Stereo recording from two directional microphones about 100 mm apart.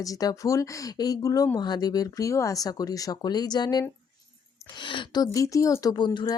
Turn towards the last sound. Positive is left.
turn(degrees=50)  # may be behind; listen again after turning